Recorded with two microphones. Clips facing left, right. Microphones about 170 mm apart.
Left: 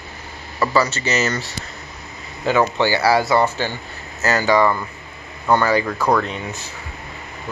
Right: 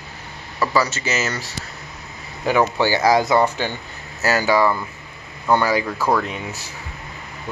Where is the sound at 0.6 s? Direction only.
10° right (ahead or behind).